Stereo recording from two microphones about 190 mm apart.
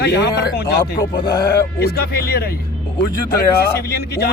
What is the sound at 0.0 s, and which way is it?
Speech, 60° left (ahead or behind).